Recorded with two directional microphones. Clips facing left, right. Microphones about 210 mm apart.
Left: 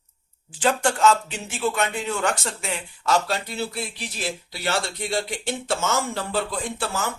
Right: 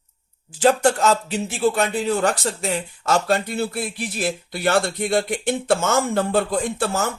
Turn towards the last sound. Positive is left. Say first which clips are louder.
# right 5 dB
turn(degrees=-45)  # may be behind; listen again after turning